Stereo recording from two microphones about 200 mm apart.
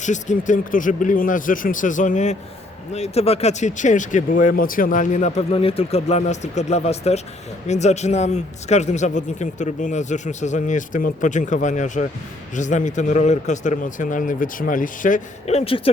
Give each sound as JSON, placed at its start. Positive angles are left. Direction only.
{"t": 0.0, "sound": "speech", "side_deg": 40}